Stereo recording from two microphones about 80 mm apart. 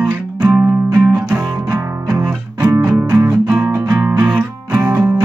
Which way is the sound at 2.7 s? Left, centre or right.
Centre.